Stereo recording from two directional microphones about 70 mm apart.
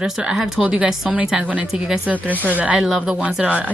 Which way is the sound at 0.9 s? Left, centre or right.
Centre.